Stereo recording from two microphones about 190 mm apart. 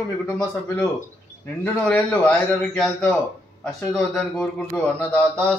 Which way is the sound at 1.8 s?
5° left (ahead or behind).